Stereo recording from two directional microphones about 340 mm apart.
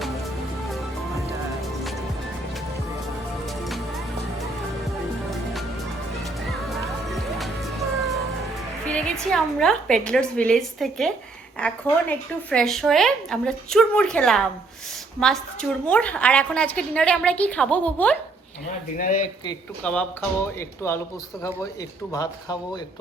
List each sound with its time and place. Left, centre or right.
7.1 s music: centre
9.1 s a woman's voice: centre
18.9 s speech: left
19.5 s speech: centre
22.1 s speech: centre